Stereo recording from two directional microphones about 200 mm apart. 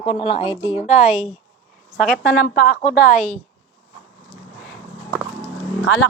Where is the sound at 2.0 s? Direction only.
5° left (ahead or behind).